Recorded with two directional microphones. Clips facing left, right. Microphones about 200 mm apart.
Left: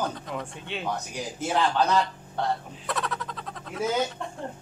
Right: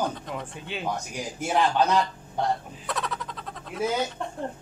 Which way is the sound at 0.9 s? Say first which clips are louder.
Even; 10° right (ahead or behind).